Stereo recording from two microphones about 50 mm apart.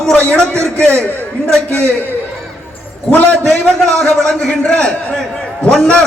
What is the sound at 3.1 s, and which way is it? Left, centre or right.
Speech, left.